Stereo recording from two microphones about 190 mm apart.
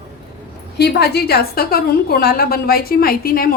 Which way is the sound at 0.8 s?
60° left (ahead or behind).